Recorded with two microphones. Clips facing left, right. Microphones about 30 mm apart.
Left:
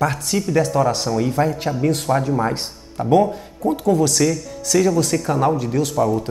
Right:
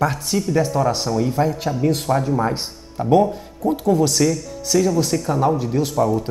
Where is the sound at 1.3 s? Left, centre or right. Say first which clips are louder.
Left 1 dB; left.